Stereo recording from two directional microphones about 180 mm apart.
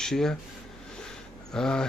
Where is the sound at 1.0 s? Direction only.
5° left (ahead or behind).